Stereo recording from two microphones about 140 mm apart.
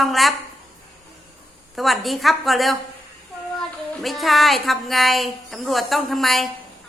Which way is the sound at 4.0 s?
Centre (ahead or behind).